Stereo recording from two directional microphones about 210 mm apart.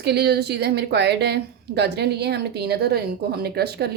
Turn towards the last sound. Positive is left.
turn(degrees=-50)  # may be behind; listen again after turning